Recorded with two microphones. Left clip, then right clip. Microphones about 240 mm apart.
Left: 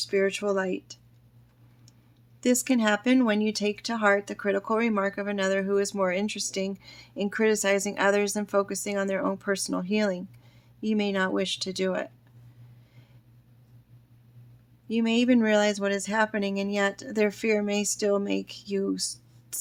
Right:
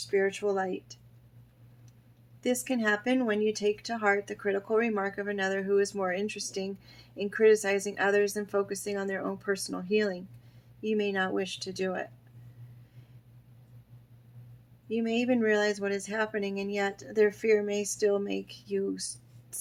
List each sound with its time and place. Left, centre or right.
0.1 s speech: left
2.4 s speech: left
14.8 s speech: left